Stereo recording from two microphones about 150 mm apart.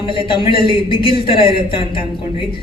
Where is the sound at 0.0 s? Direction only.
35° left (ahead or behind).